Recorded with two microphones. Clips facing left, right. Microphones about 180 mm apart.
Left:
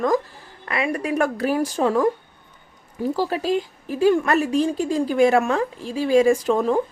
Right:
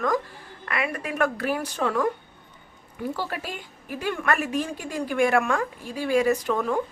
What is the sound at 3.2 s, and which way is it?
A woman's voice, 30° left (ahead or behind).